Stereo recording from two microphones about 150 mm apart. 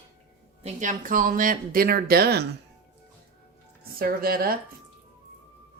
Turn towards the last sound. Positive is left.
turn(degrees=-85)